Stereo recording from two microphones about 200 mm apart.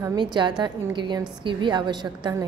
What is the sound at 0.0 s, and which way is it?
A woman's voice, 20° right (ahead or behind).